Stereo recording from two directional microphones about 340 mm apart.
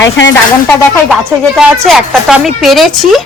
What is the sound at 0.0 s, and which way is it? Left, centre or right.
Speech, left.